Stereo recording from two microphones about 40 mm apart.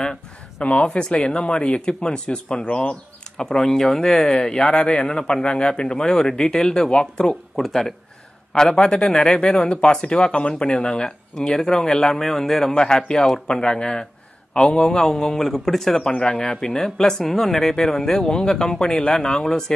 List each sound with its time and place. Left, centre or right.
0.0 s a sound: left
0.7 s speech: left
2.7 s a sound: left
3.4 s speech: centre
4.7 s a man's voice: left
5.1 s speech: left
7.5 s speech: centre
8.8 s speech: centre